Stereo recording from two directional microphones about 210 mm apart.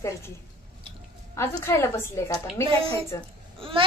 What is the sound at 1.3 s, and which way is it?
A woman's voice, 10° left (ahead or behind).